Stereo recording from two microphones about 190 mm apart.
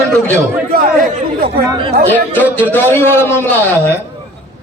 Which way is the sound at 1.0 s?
50° right (ahead or behind).